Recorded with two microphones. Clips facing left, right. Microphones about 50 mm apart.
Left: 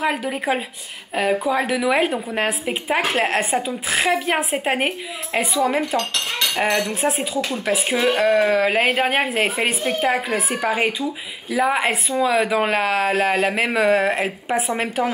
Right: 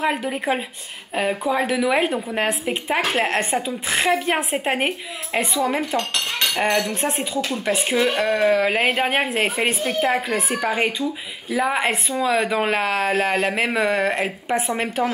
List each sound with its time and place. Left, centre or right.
0.0 s a woman's voice: centre
5.9 s cutlery: right
6.5 s a woman's voice: centre
7.3 s a woman's voice: centre
9.8 s a woman's voice: centre